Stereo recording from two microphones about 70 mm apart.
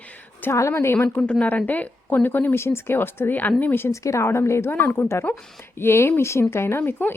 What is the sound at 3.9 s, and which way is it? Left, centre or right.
Speech, left.